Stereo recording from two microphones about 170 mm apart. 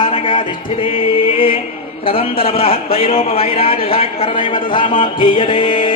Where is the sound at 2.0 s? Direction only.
35° left (ahead or behind).